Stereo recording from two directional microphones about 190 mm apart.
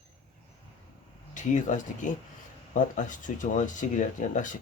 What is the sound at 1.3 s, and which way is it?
Speech, 40° left (ahead or behind).